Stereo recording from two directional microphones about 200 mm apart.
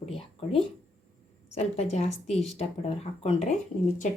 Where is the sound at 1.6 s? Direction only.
35° left (ahead or behind).